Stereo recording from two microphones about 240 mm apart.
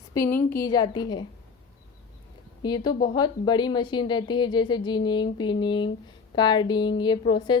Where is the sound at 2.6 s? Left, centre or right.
Centre.